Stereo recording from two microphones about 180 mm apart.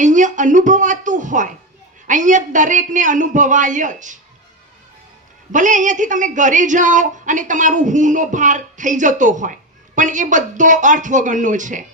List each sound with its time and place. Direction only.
0.0 s a woman's voice: 45° right (ahead or behind)
5.5 s a woman's voice: 45° right (ahead or behind)